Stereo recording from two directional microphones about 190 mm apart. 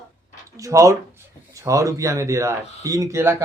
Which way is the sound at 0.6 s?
15° right (ahead or behind).